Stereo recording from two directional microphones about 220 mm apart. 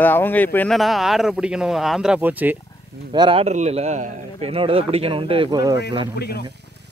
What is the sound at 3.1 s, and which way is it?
A man's voice, 20° right (ahead or behind).